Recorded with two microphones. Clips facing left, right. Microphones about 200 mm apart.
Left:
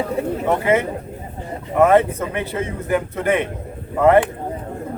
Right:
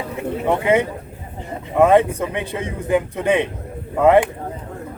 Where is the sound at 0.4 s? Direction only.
15° right (ahead or behind).